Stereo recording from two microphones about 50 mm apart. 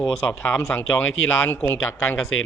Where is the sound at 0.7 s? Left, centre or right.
Left.